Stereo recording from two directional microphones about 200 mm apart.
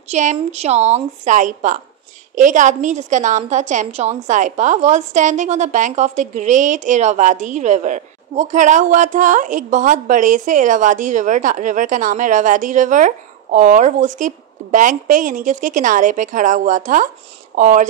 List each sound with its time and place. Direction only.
0.1 s a woman's voice: 35° right (ahead or behind)